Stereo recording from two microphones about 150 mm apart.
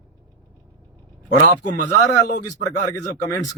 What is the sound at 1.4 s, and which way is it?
Speech, 55° left (ahead or behind).